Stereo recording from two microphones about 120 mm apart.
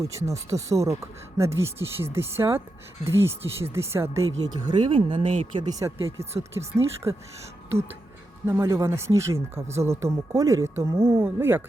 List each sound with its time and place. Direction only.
0.0 s speech: 25° right (ahead or behind)
4.4 s speech: 40° right (ahead or behind)
6.1 s speech: 25° right (ahead or behind)
8.4 s speech: 25° right (ahead or behind)